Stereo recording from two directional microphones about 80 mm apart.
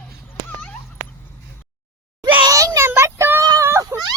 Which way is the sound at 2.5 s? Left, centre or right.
Right.